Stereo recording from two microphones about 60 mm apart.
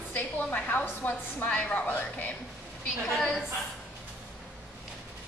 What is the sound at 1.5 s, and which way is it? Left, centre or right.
Speech, left.